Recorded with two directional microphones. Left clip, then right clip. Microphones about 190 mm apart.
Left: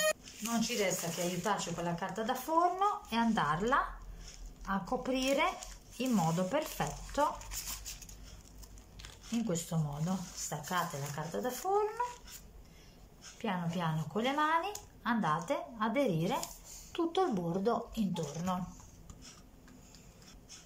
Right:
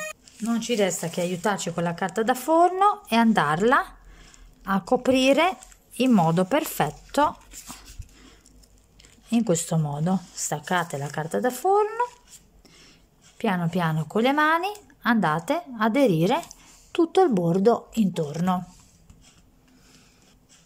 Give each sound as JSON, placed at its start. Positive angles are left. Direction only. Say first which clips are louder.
{"t": 0.5, "sound": "speech", "louder": "right 9 dB", "side_deg": -55}
{"t": 9.3, "sound": "speech", "louder": "right 13 dB", "side_deg": -55}
{"t": 13.4, "sound": "speech", "louder": "right 11 dB", "side_deg": -60}